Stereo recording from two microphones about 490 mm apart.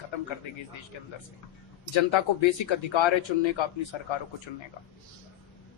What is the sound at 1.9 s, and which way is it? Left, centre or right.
Speech, left.